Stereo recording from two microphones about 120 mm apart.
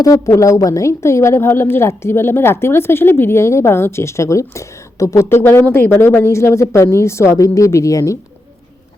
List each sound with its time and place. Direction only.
0.0 s a woman's voice: 25° left (ahead or behind)